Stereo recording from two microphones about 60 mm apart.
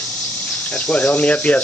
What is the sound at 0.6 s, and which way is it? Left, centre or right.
Speech, left.